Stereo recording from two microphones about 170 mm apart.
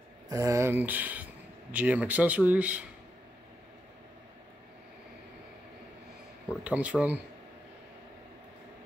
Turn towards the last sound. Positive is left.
turn(degrees=-10)  # may be behind; listen again after turning